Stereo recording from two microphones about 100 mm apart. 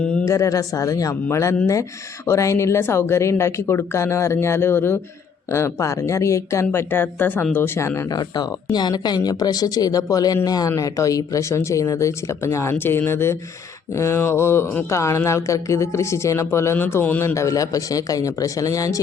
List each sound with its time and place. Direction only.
0.0 s a sound: 10° left (ahead or behind)
0.3 s speech: 35° left (ahead or behind)
8.1 s speech: 45° left (ahead or behind)